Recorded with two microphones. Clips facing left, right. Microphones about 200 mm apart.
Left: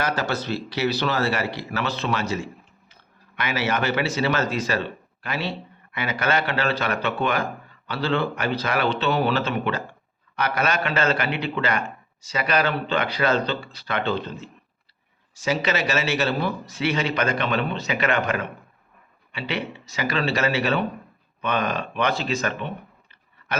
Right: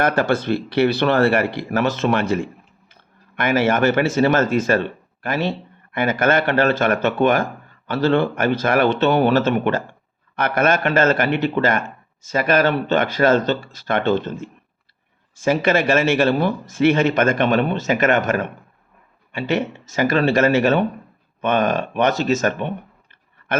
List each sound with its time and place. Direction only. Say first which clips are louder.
0.0 s a man's voice: right 7 dB; 55° right (ahead or behind)